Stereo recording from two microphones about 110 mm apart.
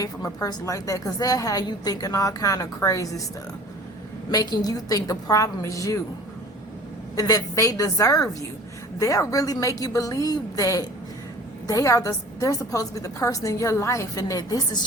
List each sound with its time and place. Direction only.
0.0 s a woman's voice: 30° left (ahead or behind)
4.3 s a woman's voice: 35° left (ahead or behind)
7.2 s a woman's voice: 35° left (ahead or behind)